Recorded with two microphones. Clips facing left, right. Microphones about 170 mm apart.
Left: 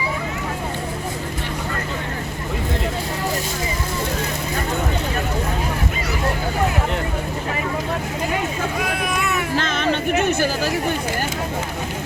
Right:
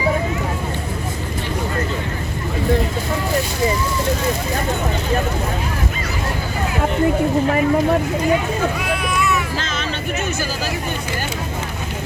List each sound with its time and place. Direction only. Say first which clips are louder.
9.0 s hubbub: right 2 dB; 50° left (ahead or behind)